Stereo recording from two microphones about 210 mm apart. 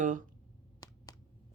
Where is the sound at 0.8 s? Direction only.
15° left (ahead or behind).